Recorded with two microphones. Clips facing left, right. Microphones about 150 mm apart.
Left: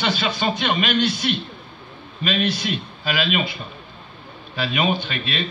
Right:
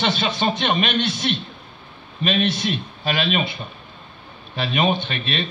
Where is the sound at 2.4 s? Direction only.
25° right (ahead or behind).